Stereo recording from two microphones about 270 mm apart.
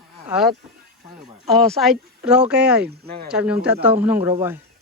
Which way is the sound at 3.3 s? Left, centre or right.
Centre.